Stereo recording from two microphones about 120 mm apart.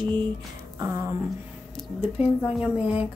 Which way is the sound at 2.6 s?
10° right (ahead or behind).